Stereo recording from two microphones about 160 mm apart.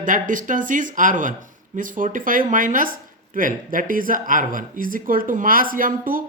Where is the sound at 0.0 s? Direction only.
55° right (ahead or behind).